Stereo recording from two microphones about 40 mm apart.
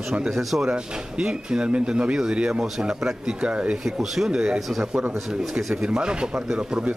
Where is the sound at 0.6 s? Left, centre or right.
Right.